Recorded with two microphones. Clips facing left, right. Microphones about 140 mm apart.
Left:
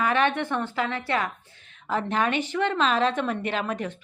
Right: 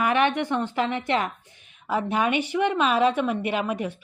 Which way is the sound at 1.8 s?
10° right (ahead or behind).